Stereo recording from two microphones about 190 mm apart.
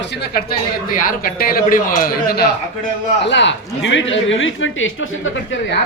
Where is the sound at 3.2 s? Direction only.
70° left (ahead or behind); by 5.5 s 90° left.